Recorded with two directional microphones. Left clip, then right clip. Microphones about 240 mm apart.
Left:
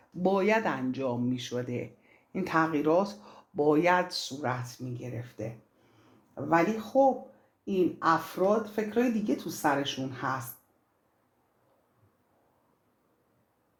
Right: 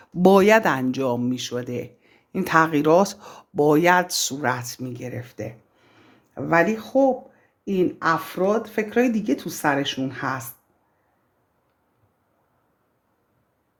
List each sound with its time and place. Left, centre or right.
0.2 s speech: right